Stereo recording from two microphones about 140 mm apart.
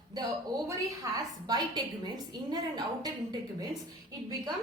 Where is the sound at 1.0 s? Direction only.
25° right (ahead or behind).